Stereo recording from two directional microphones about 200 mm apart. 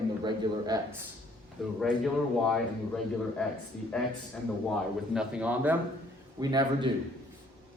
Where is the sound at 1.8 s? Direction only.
Centre (ahead or behind).